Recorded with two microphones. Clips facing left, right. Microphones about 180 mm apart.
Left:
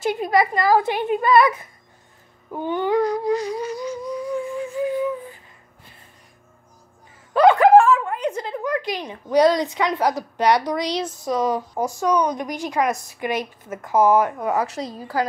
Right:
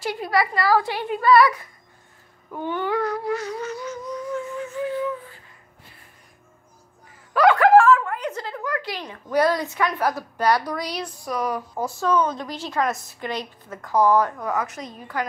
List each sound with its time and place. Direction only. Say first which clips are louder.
0.0 s a woman's voice: left 4 dB; 20° left (ahead or behind)
2.5 s humming: left 4 dB; 20° left (ahead or behind)
7.3 s a woman's voice: left 2 dB; 20° left (ahead or behind)